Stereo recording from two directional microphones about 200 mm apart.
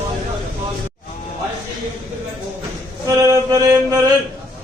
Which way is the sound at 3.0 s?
15° right (ahead or behind).